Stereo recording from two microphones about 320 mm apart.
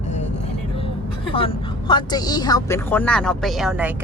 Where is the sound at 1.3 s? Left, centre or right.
Centre.